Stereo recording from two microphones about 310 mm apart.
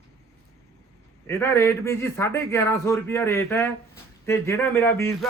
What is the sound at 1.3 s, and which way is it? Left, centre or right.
A man's voice, centre.